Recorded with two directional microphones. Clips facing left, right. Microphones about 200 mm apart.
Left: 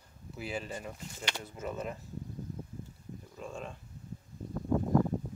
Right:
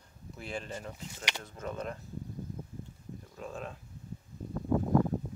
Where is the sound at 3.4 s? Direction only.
Centre (ahead or behind).